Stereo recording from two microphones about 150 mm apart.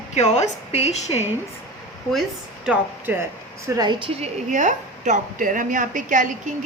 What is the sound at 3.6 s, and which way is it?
Speech, 25° right (ahead or behind).